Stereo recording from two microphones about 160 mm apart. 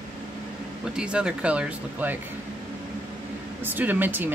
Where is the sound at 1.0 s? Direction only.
5° right (ahead or behind).